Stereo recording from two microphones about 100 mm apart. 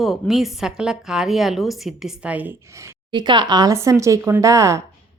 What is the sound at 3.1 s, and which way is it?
Speech, 50° right (ahead or behind).